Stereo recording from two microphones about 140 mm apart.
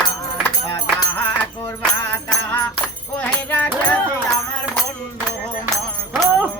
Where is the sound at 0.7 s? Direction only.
15° left (ahead or behind).